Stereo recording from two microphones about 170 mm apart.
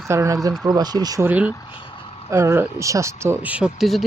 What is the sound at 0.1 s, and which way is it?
Speech, 20° right (ahead or behind).